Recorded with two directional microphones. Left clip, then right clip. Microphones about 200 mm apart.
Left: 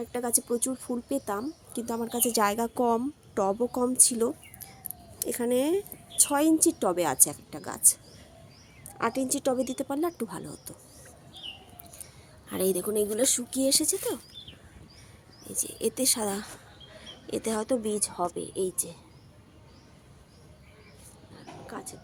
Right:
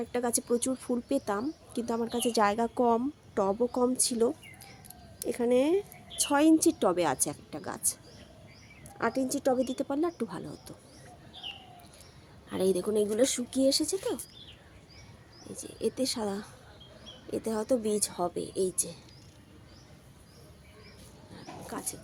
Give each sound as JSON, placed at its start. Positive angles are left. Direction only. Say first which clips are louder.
{"t": 0.0, "sound": "speech", "louder": "even", "side_deg": -5}
{"t": 9.0, "sound": "speech", "louder": "left 1 dB", "side_deg": 5}
{"t": 12.5, "sound": "speech", "louder": "even", "side_deg": 5}
{"t": 15.4, "sound": "speech", "louder": "left 2 dB", "side_deg": 5}
{"t": 21.3, "sound": "a sound", "louder": "right 1 dB", "side_deg": -20}